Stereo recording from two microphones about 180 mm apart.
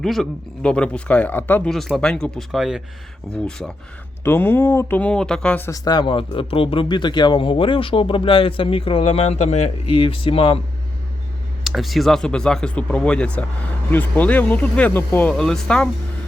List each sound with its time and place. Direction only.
0.0 s speech: centre (ahead or behind); by 10.6 s 30° left (ahead or behind)
11.6 s speech: centre (ahead or behind)